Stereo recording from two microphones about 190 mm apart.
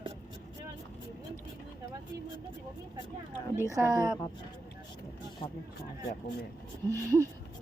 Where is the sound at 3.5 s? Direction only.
15° right (ahead or behind).